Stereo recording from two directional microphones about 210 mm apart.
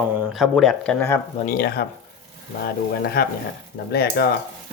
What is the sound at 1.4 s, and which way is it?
Speech, 50° left (ahead or behind).